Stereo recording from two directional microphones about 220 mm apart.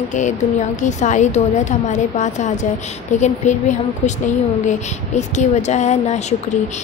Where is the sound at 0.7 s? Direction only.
35° left (ahead or behind).